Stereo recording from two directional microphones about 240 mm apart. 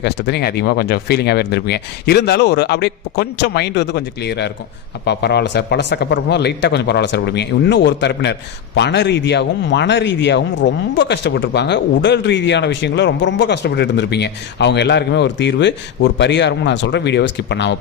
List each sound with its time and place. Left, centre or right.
0.0 s speech: left